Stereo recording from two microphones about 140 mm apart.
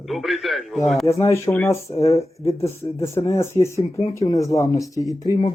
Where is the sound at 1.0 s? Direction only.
20° left (ahead or behind).